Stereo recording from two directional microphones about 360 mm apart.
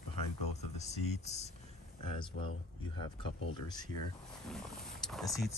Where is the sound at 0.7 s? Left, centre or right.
Centre.